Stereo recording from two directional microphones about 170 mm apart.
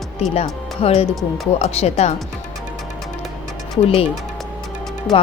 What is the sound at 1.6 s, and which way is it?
Speech, 40° left (ahead or behind).